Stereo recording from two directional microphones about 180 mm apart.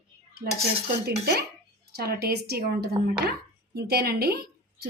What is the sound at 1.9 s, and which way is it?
A woman's voice, 60° right (ahead or behind).